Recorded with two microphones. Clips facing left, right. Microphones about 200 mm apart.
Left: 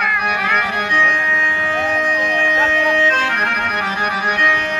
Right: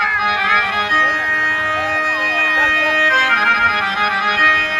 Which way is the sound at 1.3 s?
65° right (ahead or behind).